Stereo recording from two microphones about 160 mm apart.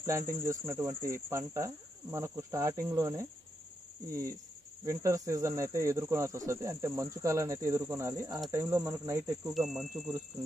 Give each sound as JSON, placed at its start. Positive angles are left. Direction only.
{"t": 0.0, "sound": "cricket", "side_deg": -20}
{"t": 4.1, "sound": "speech", "side_deg": -20}
{"t": 8.5, "sound": "cricket", "side_deg": -15}
{"t": 9.4, "sound": "speech", "side_deg": 0}